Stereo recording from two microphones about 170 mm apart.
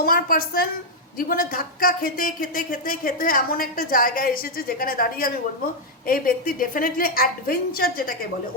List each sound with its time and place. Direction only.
0.0 s speech: 60° left (ahead or behind)